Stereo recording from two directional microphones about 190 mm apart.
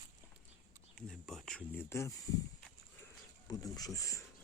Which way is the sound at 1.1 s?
Centre (ahead or behind).